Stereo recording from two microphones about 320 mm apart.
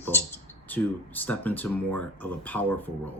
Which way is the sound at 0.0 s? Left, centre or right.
Centre.